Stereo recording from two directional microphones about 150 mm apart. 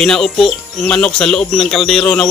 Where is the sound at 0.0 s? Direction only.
5° left (ahead or behind).